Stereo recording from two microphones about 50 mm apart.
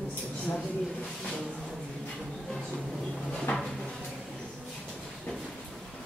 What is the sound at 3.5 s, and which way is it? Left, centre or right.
Drawer open or close, left.